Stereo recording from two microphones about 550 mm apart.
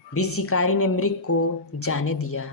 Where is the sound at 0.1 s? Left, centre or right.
Left.